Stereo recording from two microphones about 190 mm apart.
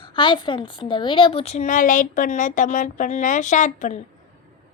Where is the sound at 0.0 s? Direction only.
25° left (ahead or behind).